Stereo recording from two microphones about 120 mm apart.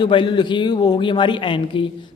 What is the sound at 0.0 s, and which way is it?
A man's voice, 40° left (ahead or behind).